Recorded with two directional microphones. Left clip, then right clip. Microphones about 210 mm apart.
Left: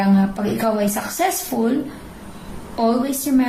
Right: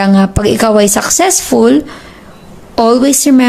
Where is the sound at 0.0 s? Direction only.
50° right (ahead or behind).